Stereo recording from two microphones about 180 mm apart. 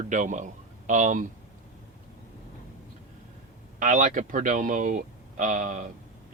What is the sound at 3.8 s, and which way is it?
Speech, 45° right (ahead or behind).